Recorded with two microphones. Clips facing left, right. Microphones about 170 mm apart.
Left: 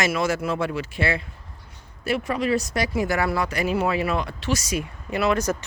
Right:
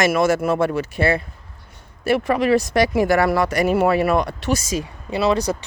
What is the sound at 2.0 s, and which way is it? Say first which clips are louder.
Speech: right 6 dB; 65° right (ahead or behind).